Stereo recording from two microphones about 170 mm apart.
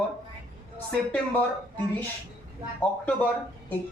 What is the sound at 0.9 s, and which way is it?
Speech, 10° left (ahead or behind).